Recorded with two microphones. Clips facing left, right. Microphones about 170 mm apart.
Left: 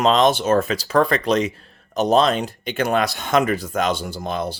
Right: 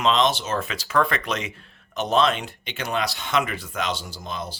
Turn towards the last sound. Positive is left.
turn(degrees=60)  # may be behind; listen again after turning